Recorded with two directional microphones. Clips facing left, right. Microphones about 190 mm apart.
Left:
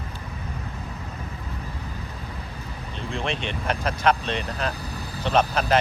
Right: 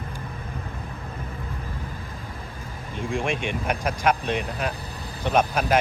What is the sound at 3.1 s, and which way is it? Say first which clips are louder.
Speech: right 2 dB; 10° right (ahead or behind).